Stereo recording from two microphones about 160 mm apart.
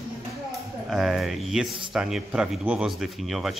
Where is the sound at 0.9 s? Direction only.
Centre (ahead or behind).